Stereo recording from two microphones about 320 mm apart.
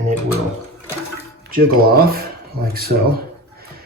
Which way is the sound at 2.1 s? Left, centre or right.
Right.